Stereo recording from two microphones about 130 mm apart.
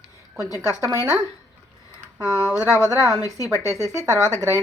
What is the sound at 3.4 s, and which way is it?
Speech, 25° right (ahead or behind).